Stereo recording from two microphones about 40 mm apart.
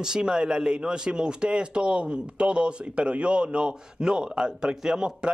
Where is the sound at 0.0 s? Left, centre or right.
Centre.